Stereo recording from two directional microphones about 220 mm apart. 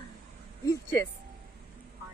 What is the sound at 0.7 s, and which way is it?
Speech, 10° left (ahead or behind).